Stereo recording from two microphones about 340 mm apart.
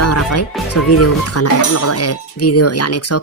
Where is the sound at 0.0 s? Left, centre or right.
Left.